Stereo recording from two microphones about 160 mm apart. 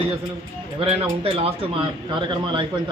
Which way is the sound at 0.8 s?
35° right (ahead or behind).